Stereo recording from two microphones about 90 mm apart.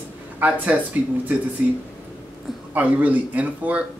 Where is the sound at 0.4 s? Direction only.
15° right (ahead or behind).